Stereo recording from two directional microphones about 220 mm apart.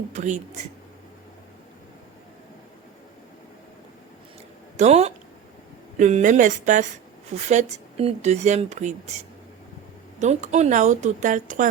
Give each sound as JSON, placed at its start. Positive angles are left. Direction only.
{"t": 0.1, "sound": "speech", "side_deg": -35}
{"t": 4.8, "sound": "speech", "side_deg": -30}
{"t": 10.2, "sound": "speech", "side_deg": -30}